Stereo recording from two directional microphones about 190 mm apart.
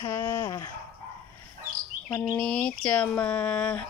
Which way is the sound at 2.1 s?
10° left (ahead or behind).